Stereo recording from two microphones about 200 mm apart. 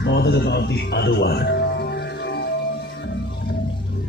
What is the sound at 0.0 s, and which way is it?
Speech, 55° left (ahead or behind).